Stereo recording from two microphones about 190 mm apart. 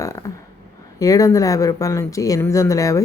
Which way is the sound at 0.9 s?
20° left (ahead or behind).